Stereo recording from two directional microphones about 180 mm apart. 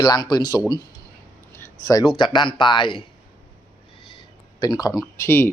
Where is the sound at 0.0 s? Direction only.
25° left (ahead or behind).